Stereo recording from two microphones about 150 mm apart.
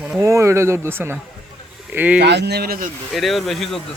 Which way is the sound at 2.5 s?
90° right.